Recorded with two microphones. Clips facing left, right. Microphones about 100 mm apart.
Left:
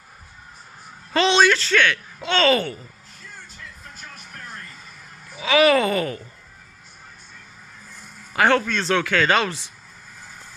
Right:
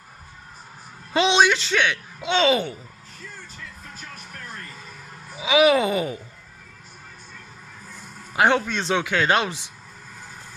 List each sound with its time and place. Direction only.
1.1 s speech: 15° right (ahead or behind)
5.4 s speech: 10° right (ahead or behind)
8.3 s speech: 15° right (ahead or behind)